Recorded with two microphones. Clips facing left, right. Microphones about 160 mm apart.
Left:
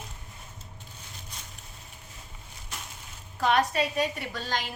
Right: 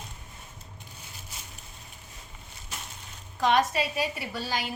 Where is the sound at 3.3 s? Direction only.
Centre (ahead or behind).